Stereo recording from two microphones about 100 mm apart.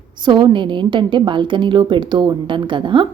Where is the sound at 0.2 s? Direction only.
50° right (ahead or behind).